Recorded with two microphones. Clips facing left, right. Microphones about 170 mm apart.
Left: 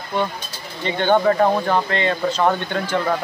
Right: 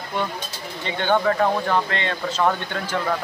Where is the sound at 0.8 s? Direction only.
Centre (ahead or behind).